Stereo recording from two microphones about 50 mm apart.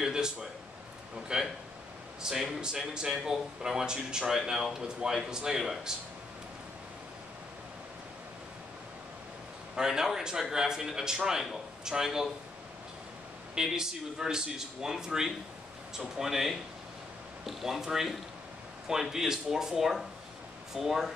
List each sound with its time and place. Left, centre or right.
0.0 s speech: centre
9.8 s speech: centre
13.6 s speech: centre